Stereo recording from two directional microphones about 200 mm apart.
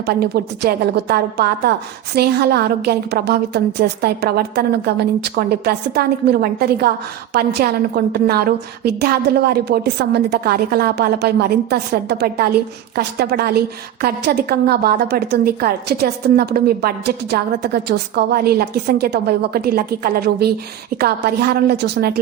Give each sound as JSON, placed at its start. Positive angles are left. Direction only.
{"t": 0.0, "sound": "a woman's voice", "side_deg": -50}